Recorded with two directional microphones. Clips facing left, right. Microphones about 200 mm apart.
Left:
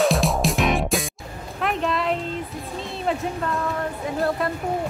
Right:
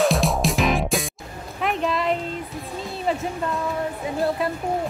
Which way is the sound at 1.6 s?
Centre (ahead or behind).